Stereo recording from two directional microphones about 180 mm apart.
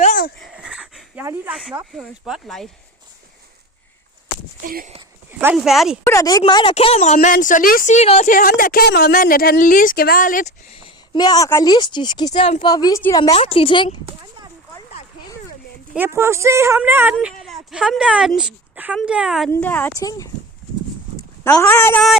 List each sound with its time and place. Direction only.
0.0 s a sound: 50° left (ahead or behind)
0.3 s a sound: centre (ahead or behind)
2.0 s speech: centre (ahead or behind)
4.6 s speech: 50° right (ahead or behind)
5.4 s speech: 5° right (ahead or behind)
6.1 s a woman's voice: 20° left (ahead or behind); by 8.3 s 35° left (ahead or behind)
8.3 s speech: 50° left (ahead or behind)
10.8 s speech: 30° left (ahead or behind)
12.7 s speech: 20° left (ahead or behind)
13.3 s a woman's voice: 30° left (ahead or behind)
16.0 s speech: 15° right (ahead or behind)
19.5 s speech: 10° left (ahead or behind)